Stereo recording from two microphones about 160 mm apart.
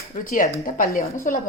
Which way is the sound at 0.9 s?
20° left (ahead or behind).